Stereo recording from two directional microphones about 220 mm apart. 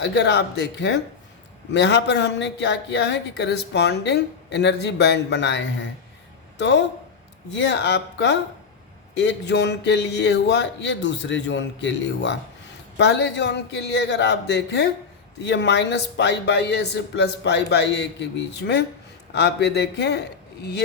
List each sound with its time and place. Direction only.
0.0 s speech: 50° left (ahead or behind)